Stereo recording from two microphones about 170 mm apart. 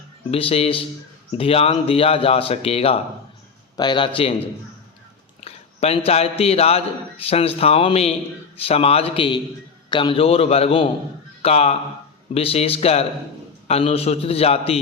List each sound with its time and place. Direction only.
0.3 s a man's voice: 35° left (ahead or behind)